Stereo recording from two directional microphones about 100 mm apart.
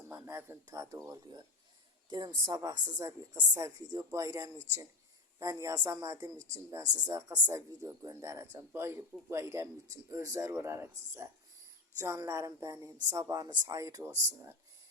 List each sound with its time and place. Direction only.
0.1 s a woman's voice: 25° right (ahead or behind)